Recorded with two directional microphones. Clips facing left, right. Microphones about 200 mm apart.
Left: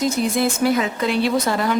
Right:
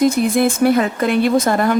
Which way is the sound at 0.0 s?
55° right (ahead or behind).